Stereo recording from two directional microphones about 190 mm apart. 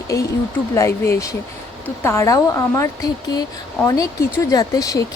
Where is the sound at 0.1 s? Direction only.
15° left (ahead or behind).